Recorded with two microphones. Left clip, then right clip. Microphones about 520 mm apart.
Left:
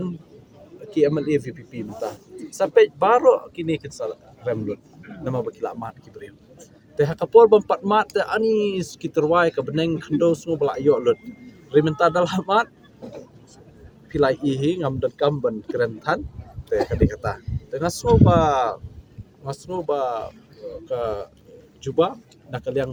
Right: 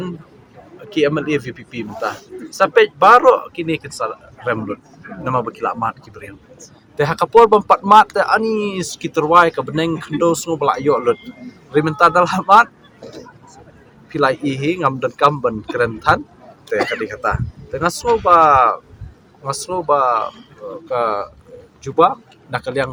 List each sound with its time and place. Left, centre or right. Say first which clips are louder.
0.9 s speech: right 3 dB; left
14.1 s speech: right 3 dB; left